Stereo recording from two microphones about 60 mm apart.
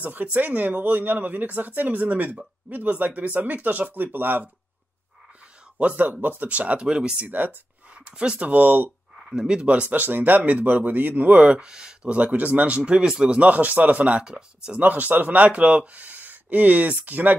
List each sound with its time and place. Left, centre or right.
0.0 s speech: right
5.8 s speech: right
7.2 s speech: right
8.5 s speech: right
9.3 s speech: centre
9.8 s speech: right; by 14.8 s centre
14.8 s speech: right